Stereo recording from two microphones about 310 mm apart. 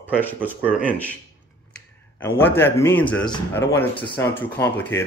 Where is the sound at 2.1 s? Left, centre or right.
Centre.